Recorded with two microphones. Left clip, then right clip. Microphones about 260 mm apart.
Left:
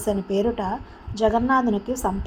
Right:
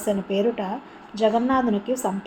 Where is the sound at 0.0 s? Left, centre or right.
Left.